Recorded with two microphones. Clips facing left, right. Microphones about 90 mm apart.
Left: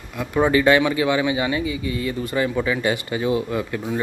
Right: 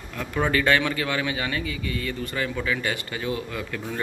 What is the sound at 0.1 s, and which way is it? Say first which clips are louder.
Speech: left 6 dB; 15° left (ahead or behind).